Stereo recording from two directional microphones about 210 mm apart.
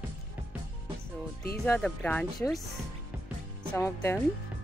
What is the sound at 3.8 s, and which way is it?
Speech, 10° left (ahead or behind).